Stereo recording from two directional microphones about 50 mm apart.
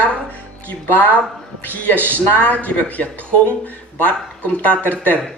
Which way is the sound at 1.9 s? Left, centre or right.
Right.